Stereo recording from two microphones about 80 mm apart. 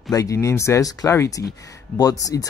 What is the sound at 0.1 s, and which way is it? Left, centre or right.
Speech, left.